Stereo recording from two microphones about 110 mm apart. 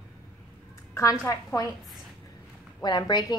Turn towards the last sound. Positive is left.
turn(degrees=35)  # may be behind; listen again after turning